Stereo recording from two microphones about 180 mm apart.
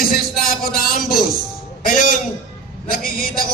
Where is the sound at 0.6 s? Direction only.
55° left (ahead or behind).